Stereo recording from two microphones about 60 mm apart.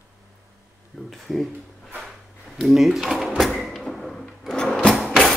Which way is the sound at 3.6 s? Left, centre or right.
Centre.